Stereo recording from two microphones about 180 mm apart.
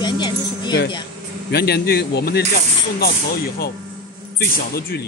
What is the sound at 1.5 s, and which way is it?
Speech, 60° left (ahead or behind).